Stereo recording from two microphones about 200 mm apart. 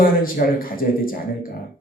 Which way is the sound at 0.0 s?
45° left (ahead or behind).